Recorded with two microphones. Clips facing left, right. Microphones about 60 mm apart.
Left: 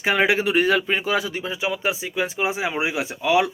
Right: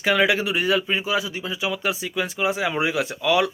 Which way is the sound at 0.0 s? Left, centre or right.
Left.